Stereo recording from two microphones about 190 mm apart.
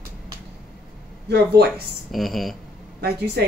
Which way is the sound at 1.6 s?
55° right (ahead or behind).